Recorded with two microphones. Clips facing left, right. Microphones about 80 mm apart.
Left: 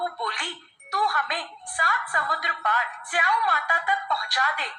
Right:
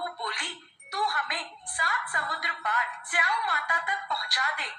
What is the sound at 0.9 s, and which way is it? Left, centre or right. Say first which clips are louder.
Speech: left 5 dB; left.